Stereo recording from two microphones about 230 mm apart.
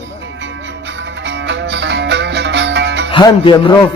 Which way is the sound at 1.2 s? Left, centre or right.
Right.